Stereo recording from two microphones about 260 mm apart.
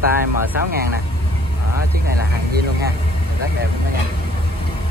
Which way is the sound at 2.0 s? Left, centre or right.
Right.